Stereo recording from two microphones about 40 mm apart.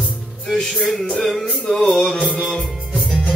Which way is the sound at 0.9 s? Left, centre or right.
Centre.